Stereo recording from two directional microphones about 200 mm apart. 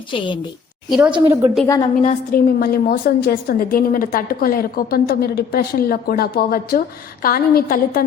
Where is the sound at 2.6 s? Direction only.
50° left (ahead or behind).